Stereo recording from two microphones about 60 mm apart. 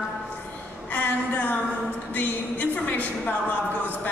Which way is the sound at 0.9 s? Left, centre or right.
Left.